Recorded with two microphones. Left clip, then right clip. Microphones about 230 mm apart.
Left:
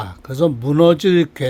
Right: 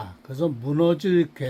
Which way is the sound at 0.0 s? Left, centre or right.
Left.